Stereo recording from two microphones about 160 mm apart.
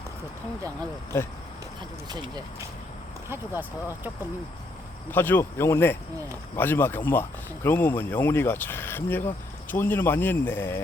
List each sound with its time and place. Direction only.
2.0 s speech: 25° right (ahead or behind)
3.2 s speech: 15° right (ahead or behind)
5.1 s speech: 15° left (ahead or behind)